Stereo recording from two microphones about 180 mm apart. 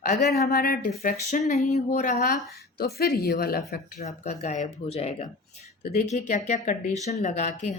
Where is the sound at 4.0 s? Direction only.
40° left (ahead or behind).